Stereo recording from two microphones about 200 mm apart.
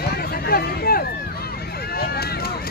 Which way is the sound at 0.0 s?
50° left (ahead or behind).